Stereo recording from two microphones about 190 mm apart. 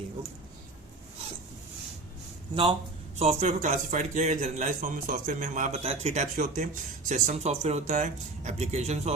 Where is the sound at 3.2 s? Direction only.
35° right (ahead or behind).